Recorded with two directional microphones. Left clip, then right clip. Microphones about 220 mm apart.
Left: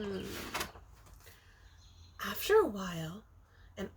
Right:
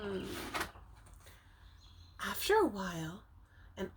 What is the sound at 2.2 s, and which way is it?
Speech, 15° right (ahead or behind).